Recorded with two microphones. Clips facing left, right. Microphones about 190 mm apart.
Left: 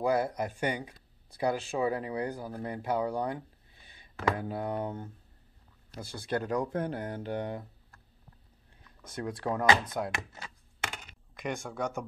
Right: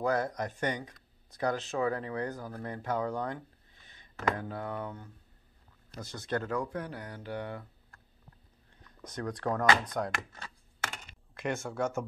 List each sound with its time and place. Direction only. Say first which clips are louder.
0.0 s speech: left 2 dB; 10° left (ahead or behind); by 5.1 s 25° left (ahead or behind)
5.9 s speech: left 1 dB; 10° left (ahead or behind)
9.1 s speech: even; 5° left (ahead or behind)
11.3 s speech: right 2 dB; 5° right (ahead or behind)